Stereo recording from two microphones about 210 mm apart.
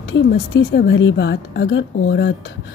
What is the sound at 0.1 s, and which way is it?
Speech, 55° left (ahead or behind).